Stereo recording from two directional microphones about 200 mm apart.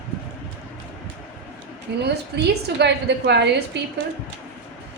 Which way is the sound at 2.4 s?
55° right (ahead or behind).